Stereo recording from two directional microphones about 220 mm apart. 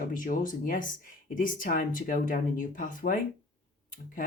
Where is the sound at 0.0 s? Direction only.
35° left (ahead or behind).